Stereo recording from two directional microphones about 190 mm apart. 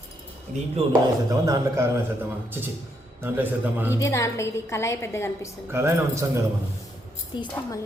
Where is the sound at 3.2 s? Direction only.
10° right (ahead or behind).